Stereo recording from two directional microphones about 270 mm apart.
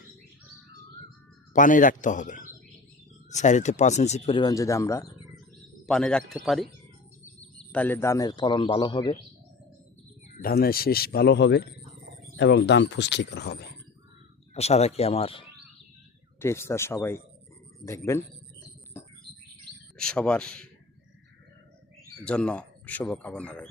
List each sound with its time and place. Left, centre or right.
1.5 s speech: left; by 6.7 s centre
7.7 s a man's voice: centre
10.4 s speech: left
14.5 s speech: left
16.4 s a man's voice: centre
20.0 s speech: centre
22.2 s speech: centre